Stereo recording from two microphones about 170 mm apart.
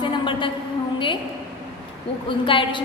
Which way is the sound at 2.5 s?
30° left (ahead or behind).